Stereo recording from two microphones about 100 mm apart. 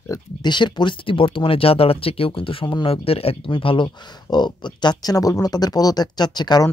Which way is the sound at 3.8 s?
45° left (ahead or behind).